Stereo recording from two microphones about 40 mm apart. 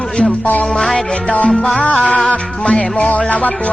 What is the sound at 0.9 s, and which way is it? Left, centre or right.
Music, left.